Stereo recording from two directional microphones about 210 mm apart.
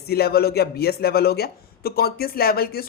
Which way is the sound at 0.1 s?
50° left (ahead or behind).